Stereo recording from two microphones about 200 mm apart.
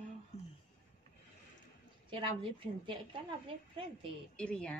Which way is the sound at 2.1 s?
25° right (ahead or behind).